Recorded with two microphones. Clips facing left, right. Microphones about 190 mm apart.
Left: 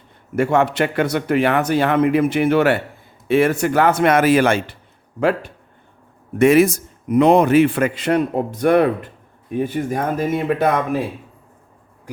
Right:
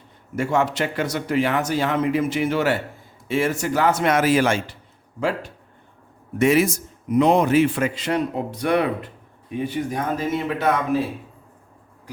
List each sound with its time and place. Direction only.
0.3 s a man's voice: 60° left (ahead or behind)
6.4 s a man's voice: 55° left (ahead or behind)